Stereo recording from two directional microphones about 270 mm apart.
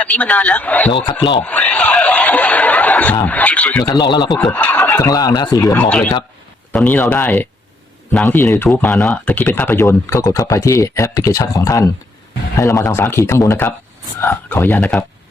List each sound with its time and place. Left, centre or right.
0.0 s speech: centre
1.0 s speech: centre
1.4 s speech: centre
4.3 s speech: centre